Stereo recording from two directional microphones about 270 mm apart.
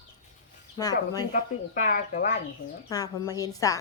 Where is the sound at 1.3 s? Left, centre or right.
Left.